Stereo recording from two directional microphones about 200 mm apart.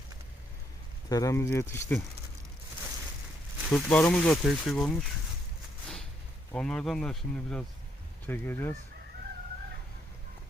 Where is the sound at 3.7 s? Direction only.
5° left (ahead or behind).